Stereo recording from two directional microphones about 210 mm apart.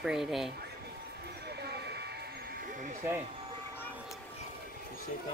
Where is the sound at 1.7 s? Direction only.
50° right (ahead or behind).